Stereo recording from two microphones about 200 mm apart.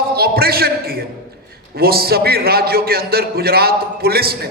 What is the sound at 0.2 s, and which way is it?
A man's voice, 50° right (ahead or behind).